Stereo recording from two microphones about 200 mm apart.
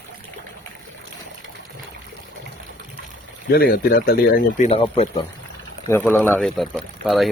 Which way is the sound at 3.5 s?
50° left (ahead or behind).